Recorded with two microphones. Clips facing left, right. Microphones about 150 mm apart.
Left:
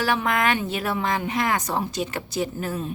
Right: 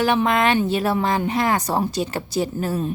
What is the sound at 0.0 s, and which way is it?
A woman's voice, 25° right (ahead or behind).